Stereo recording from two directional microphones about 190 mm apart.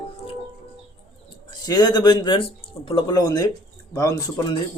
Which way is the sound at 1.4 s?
20° left (ahead or behind).